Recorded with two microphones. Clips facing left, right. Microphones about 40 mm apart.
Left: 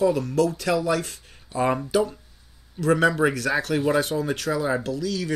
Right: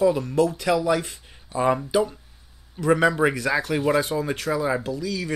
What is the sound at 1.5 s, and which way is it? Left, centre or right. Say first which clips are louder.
Speech: right 1 dB; centre.